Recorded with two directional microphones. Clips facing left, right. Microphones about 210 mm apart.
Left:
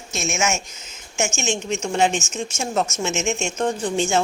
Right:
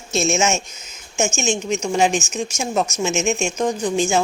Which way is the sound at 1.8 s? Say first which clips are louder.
Right 2 dB; 10° right (ahead or behind).